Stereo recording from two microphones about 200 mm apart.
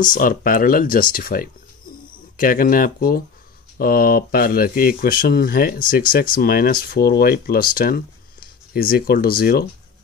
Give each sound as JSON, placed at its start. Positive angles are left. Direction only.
{"t": 0.0, "sound": "speech", "side_deg": 40}